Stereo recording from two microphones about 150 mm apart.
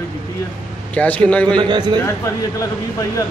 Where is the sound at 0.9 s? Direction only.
10° left (ahead or behind).